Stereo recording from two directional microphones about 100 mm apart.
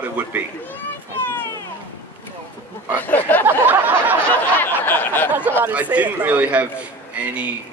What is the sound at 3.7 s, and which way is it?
Speech, 20° right (ahead or behind).